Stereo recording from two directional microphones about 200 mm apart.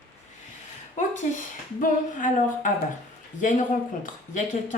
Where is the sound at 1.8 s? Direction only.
40° left (ahead or behind).